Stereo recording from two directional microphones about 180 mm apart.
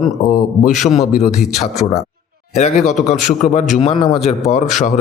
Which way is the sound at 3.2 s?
45° left (ahead or behind).